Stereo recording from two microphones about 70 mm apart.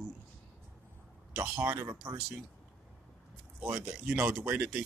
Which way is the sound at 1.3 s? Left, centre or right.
Right.